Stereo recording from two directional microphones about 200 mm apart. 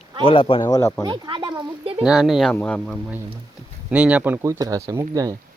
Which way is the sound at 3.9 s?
5° right (ahead or behind).